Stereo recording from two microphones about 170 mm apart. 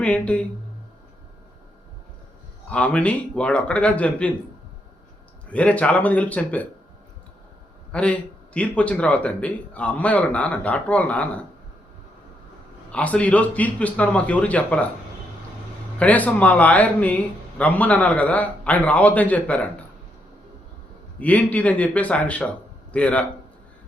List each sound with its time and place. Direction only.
0.0 s speech: 5° left (ahead or behind)
2.6 s speech: 5° left (ahead or behind)
5.5 s speech: 10° left (ahead or behind)
7.9 s speech: 5° left (ahead or behind)
12.9 s speech: 5° left (ahead or behind)
16.0 s speech: 10° left (ahead or behind)
21.2 s a man's voice: 10° left (ahead or behind)